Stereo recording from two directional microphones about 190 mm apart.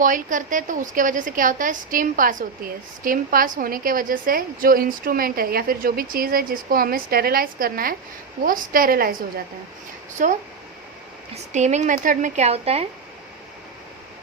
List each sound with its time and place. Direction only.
0.0 s a woman's voice: 45° right (ahead or behind)
10.2 s a woman's voice: 45° right (ahead or behind)
11.5 s a woman's voice: 40° right (ahead or behind)